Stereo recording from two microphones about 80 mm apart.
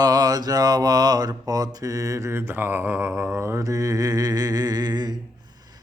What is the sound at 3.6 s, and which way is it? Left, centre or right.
Mantra, right.